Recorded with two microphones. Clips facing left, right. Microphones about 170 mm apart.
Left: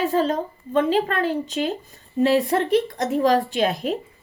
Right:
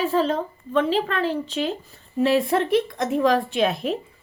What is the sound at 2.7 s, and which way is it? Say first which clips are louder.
Speech: left 1 dB; 45° left (ahead or behind).